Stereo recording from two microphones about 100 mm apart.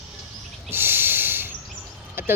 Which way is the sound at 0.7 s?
20° right (ahead or behind).